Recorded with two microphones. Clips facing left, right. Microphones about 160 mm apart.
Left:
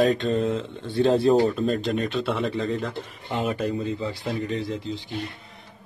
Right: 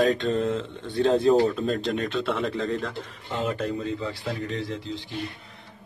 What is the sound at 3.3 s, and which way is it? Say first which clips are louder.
Speech: left 2 dB; 15° left (ahead or behind).